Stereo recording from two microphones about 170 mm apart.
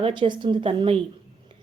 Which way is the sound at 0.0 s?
25° right (ahead or behind).